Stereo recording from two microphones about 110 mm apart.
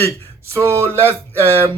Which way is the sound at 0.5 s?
25° right (ahead or behind).